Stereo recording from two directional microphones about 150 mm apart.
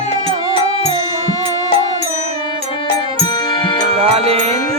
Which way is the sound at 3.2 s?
30° left (ahead or behind).